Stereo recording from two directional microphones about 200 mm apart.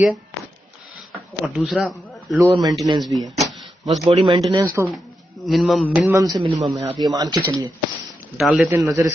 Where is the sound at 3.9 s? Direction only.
25° right (ahead or behind).